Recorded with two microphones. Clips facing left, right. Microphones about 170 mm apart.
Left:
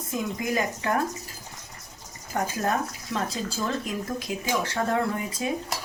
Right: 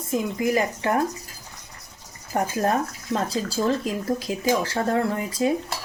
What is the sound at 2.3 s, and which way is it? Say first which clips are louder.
Speech: right 4 dB; 30° right (ahead or behind).